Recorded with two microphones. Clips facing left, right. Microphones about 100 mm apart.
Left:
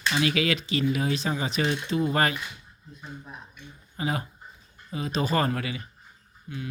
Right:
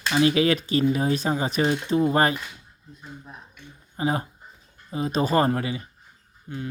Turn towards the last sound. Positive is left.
turn(degrees=-30)  # may be behind; listen again after turning